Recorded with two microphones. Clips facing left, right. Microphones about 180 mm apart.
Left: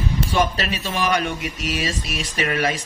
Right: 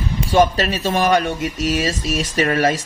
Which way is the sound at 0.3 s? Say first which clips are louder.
Right 8 dB; 45° right (ahead or behind).